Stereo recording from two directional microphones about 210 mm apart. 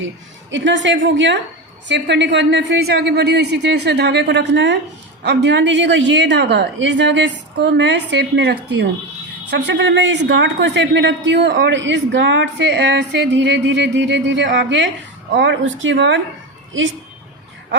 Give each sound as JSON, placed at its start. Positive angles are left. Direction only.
{"t": 0.5, "sound": "a man's voice", "side_deg": -60}